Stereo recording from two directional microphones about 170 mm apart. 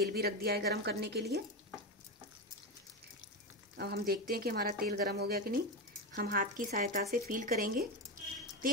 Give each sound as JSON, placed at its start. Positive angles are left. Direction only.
{"t": 0.0, "sound": "a woman's voice", "side_deg": -65}
{"t": 3.7, "sound": "speech", "side_deg": -70}